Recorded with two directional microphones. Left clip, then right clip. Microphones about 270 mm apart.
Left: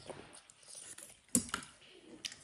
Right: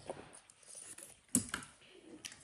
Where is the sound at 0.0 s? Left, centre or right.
Centre.